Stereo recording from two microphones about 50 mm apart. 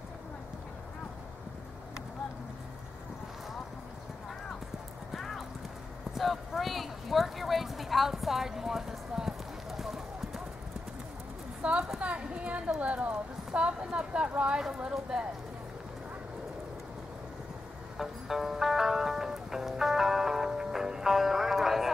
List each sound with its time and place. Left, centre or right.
5.1 s clip-clop: centre
11.6 s a sound: right
12.0 s a woman's voice: right
17.9 s music: centre